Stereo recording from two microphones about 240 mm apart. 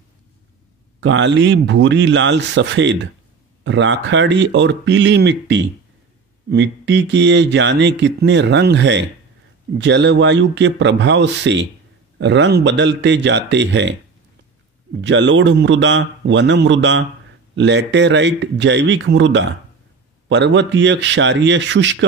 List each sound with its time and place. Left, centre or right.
1.0 s speech: right
15.0 s speech: right